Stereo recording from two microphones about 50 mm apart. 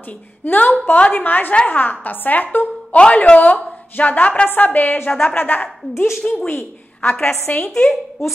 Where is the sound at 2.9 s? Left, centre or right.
Left.